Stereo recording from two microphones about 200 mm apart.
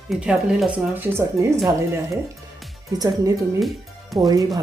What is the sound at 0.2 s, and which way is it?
Speech, 5° right (ahead or behind).